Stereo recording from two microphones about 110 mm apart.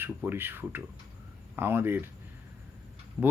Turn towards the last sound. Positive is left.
turn(degrees=-15)  # may be behind; listen again after turning